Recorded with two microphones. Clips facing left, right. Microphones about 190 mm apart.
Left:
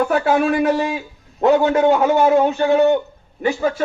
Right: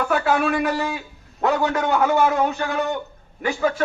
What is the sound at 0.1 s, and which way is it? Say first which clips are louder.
Speech: left 4 dB; 40° left (ahead or behind).